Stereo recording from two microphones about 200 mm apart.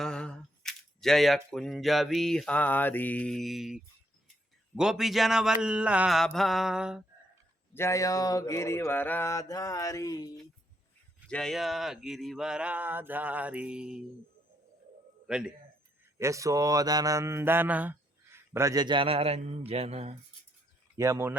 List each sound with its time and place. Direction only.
0.0 s a sound: 5° left (ahead or behind)
1.5 s speech: centre (ahead or behind)
7.7 s mantra: 15° left (ahead or behind)
11.3 s speech: 5° left (ahead or behind)
15.3 s speech: 5° right (ahead or behind)
16.1 s mantra: 15° right (ahead or behind); by 20.1 s 30° right (ahead or behind)
20.9 s speech: 15° right (ahead or behind)